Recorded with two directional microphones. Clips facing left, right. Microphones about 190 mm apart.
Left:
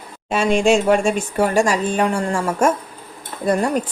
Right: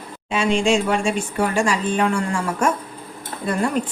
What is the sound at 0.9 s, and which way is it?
A woman's voice, 45° left (ahead or behind).